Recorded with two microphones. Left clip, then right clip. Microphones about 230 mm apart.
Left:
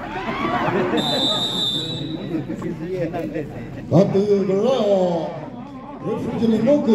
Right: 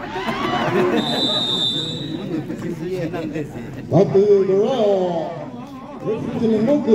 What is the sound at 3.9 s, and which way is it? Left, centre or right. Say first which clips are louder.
A man's voice: right 3 dB; left.